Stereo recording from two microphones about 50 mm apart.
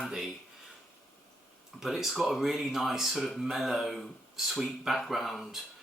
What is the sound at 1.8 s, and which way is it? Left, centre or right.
Speech, centre.